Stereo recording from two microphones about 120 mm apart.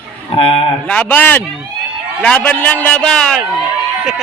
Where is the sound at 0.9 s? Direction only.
10° left (ahead or behind).